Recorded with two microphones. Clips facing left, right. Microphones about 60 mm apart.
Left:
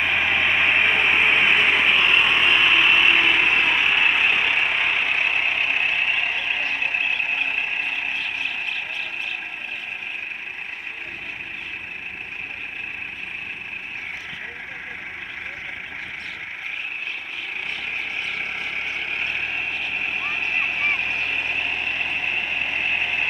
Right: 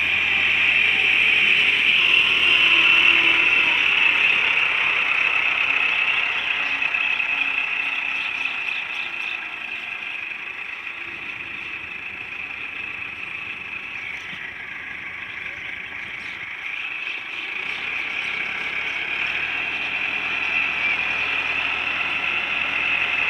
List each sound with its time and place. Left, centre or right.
0.0 s a sound: centre
2.9 s a sound: centre
3.7 s vehicle: centre
4.3 s vehicle: centre
5.0 s vehicle: right
18.4 s vehicle: right
19.1 s vehicle: right